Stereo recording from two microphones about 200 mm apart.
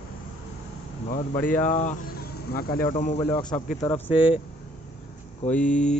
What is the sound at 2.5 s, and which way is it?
Speech, 50° left (ahead or behind).